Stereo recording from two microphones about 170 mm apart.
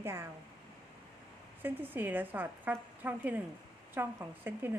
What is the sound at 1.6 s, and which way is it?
A woman's voice, 10° right (ahead or behind).